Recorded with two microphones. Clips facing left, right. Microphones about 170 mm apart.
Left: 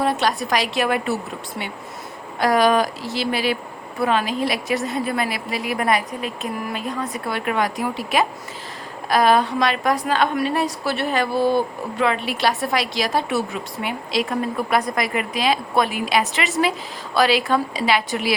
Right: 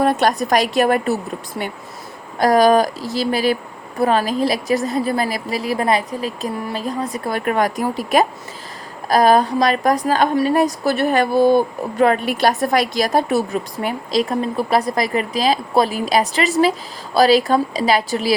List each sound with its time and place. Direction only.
0.0 s a woman's voice: 50° right (ahead or behind)
2.4 s a woman's voice: 40° right (ahead or behind)